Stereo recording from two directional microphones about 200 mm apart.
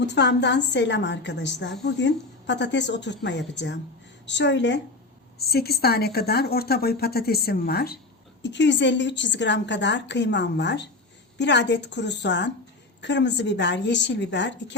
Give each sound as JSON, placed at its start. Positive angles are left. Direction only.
{"t": 0.0, "sound": "a woman's voice", "side_deg": 60}